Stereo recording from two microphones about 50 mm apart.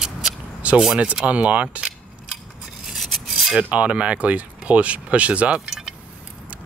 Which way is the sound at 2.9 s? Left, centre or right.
Centre.